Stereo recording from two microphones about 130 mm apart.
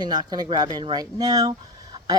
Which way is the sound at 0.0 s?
30° right (ahead or behind).